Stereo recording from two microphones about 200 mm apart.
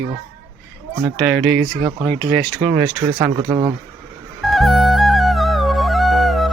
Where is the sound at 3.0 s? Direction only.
20° right (ahead or behind).